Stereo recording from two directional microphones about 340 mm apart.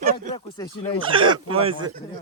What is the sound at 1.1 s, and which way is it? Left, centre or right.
Speech, centre.